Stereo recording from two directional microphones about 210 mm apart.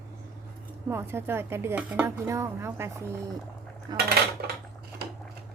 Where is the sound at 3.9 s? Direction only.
20° right (ahead or behind).